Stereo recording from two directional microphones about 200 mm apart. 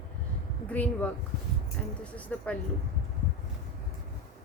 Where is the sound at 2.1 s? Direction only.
5° left (ahead or behind).